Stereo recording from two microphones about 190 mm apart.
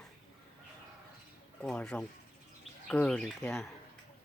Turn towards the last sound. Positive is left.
turn(degrees=0)  # may be behind; listen again after turning